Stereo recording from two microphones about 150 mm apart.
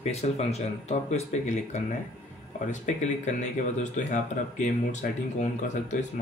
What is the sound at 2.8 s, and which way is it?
Speech, 50° left (ahead or behind).